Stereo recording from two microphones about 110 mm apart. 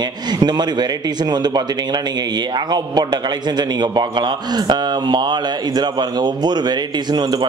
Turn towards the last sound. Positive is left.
turn(degrees=-40)  # may be behind; listen again after turning